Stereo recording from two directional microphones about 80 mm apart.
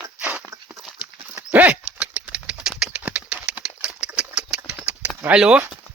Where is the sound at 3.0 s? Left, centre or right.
Centre.